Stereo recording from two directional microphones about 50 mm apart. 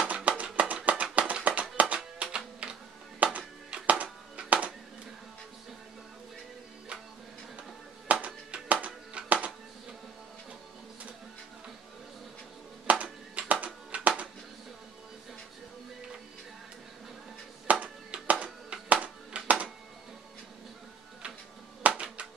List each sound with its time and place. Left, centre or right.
0.0 s music: right
8.1 s music: right
12.8 s music: right
17.6 s music: right
21.8 s a sound: right